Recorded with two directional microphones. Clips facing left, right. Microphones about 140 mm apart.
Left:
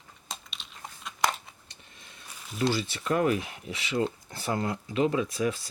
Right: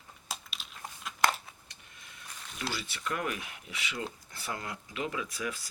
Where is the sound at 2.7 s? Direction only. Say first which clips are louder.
Left 8 dB; 30° left (ahead or behind).